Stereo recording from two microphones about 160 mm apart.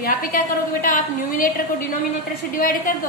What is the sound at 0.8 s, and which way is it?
Speech, 60° left (ahead or behind).